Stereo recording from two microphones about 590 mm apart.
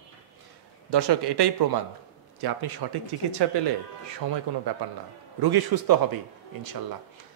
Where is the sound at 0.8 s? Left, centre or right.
Right.